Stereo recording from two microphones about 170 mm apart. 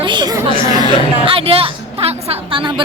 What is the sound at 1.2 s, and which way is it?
Music, 35° right (ahead or behind).